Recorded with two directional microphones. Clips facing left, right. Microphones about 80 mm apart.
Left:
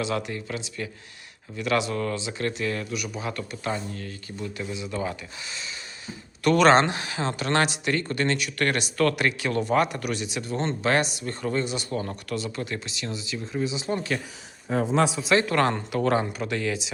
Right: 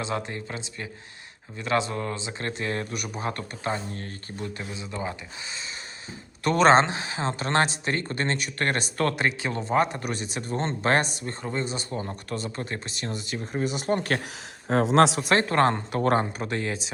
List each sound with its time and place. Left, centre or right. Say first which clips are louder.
0.0 s a man's voice: left 2 dB; right
15.3 s speech: even; right